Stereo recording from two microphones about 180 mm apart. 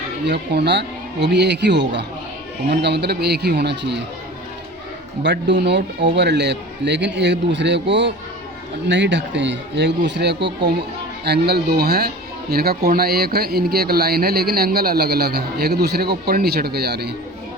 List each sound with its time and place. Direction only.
0.3 s a man's voice: 70° right (ahead or behind)
5.2 s a man's voice: 75° right (ahead or behind)